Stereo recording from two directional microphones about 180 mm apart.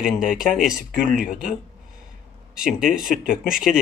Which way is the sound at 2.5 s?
5° right (ahead or behind).